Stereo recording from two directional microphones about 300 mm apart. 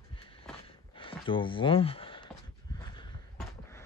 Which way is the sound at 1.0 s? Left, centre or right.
Centre.